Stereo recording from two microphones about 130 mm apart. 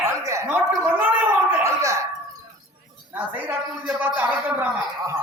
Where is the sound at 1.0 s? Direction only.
15° right (ahead or behind).